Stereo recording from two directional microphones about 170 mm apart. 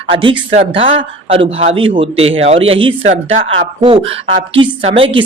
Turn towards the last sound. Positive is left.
turn(degrees=-30)  # may be behind; listen again after turning